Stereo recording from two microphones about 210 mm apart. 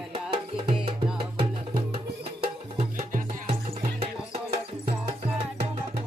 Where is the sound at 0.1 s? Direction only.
25° right (ahead or behind).